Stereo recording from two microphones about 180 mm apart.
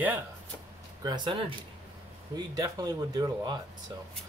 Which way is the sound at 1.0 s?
25° right (ahead or behind).